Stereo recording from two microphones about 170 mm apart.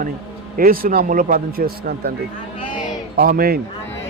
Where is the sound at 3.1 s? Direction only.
60° right (ahead or behind).